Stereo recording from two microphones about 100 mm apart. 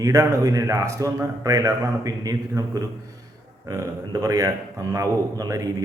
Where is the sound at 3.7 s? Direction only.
35° right (ahead or behind).